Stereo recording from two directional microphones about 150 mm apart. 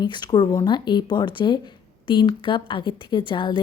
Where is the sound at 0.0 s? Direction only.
30° left (ahead or behind).